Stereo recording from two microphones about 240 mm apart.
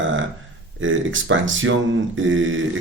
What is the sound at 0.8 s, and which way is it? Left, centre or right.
Speech, right.